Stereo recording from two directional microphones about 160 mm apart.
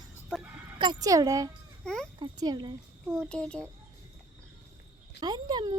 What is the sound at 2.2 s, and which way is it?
Speech, 25° right (ahead or behind).